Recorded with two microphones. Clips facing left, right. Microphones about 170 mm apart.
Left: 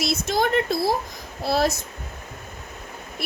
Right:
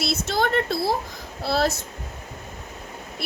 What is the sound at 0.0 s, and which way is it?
A woman's voice, 15° left (ahead or behind).